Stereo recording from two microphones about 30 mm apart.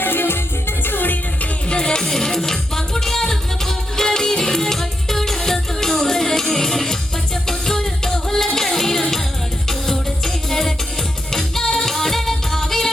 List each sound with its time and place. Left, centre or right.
0.9 s music: left
1.7 s music: left
2.0 s music: centre